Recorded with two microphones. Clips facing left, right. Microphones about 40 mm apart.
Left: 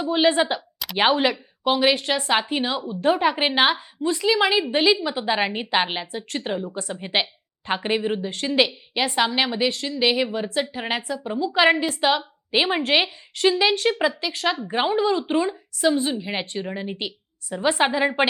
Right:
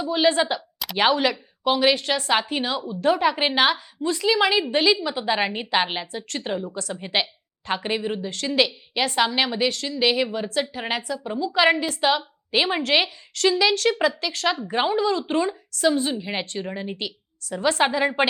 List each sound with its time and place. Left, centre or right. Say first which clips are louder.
0.1 s a woman's voice: left 1 dB; left
2.3 s a woman's voice: left 1 dB; centre
6.9 s a woman's voice: left 1 dB; centre
9.1 s a woman's voice: even; centre
15.3 s speech: left 1 dB; centre
17.5 s a woman's voice: even; left